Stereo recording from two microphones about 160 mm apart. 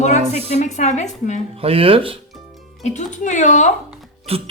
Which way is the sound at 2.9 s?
50° left (ahead or behind).